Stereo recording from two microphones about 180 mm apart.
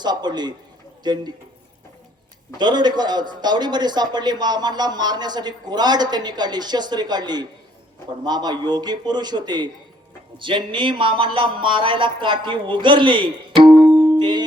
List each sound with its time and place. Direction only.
0.0 s a man's voice: 25° right (ahead or behind)
2.6 s a man's voice: 25° right (ahead or behind)
13.8 s music: 25° right (ahead or behind)